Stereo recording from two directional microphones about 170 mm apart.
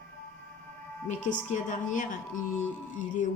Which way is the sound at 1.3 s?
50° left (ahead or behind).